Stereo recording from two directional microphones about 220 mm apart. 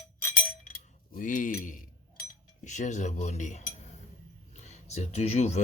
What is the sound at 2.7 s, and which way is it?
Speech, 35° left (ahead or behind).